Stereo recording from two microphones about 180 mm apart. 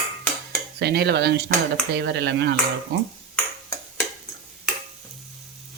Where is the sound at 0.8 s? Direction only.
65° right (ahead or behind).